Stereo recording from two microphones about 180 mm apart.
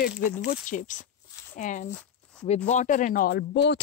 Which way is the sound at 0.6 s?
45° left (ahead or behind).